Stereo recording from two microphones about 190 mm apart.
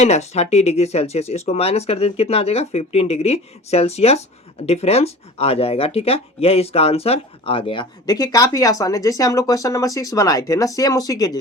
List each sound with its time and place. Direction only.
0.0 s speech: 35° left (ahead or behind); by 11.3 s 20° left (ahead or behind)